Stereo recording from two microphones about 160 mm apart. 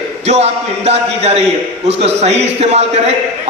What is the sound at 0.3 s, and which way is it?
A man's voice, 40° right (ahead or behind).